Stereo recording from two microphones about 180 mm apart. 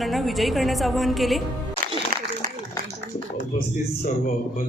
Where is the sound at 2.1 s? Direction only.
50° right (ahead or behind).